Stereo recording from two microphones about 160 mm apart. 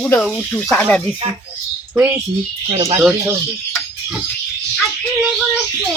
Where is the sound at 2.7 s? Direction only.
40° right (ahead or behind).